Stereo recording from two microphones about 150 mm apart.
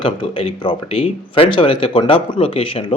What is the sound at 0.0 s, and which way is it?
A man's voice, 35° left (ahead or behind).